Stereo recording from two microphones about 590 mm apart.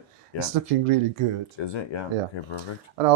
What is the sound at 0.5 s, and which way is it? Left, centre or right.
Speech, right.